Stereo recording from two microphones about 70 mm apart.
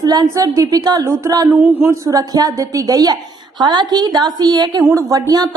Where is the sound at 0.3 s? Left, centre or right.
Right.